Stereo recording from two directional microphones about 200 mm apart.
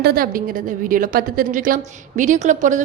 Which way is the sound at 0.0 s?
50° right (ahead or behind).